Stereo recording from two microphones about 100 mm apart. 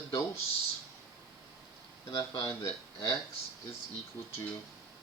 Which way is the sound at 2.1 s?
40° left (ahead or behind).